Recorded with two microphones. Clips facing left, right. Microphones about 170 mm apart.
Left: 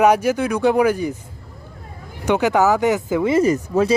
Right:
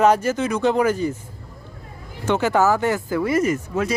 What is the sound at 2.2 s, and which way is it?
Speech, 15° left (ahead or behind).